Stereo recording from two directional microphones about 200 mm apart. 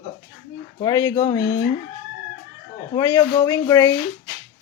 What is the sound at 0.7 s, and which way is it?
Speech, 20° left (ahead or behind).